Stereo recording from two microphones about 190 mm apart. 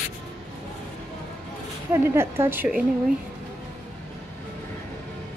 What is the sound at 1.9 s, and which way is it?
Speech, 15° right (ahead or behind).